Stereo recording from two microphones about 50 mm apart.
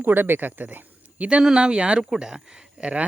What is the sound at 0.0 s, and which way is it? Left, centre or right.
Speech, right.